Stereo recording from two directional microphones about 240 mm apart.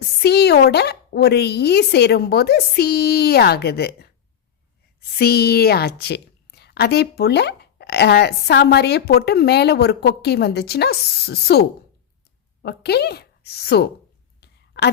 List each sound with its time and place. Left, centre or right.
0.0 s speech: left
12.6 s speech: left
14.4 s a sound: left